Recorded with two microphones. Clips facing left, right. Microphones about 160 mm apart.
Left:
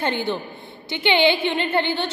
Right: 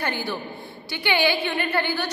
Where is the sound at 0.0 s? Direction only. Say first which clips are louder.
Left 4 dB; 25° left (ahead or behind).